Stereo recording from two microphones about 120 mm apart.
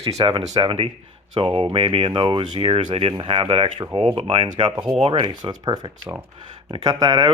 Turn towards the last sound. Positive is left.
turn(degrees=-30)  # may be behind; listen again after turning